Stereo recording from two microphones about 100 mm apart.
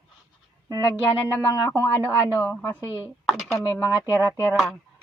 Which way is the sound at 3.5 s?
30° left (ahead or behind).